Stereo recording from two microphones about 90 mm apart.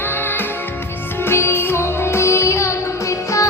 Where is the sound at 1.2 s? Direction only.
25° left (ahead or behind).